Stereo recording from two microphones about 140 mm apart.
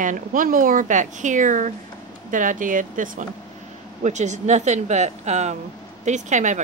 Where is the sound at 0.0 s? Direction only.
70° right (ahead or behind).